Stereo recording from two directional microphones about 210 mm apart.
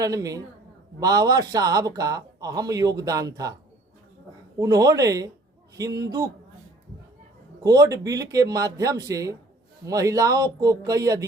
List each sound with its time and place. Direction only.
0.0 s a man's voice: 15° right (ahead or behind)
4.6 s a man's voice: 15° right (ahead or behind)
7.6 s a man's voice: 15° right (ahead or behind)